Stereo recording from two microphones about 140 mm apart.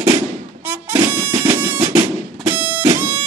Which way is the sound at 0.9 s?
15° right (ahead or behind).